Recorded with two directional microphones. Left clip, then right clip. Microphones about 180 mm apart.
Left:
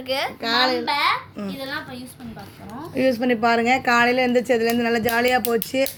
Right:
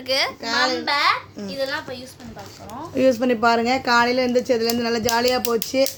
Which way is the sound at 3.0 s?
40° right (ahead or behind).